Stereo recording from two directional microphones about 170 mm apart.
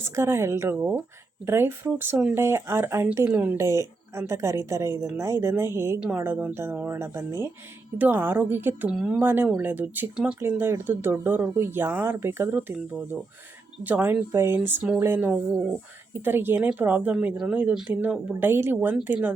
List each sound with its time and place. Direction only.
0.0 s speech: 15° right (ahead or behind)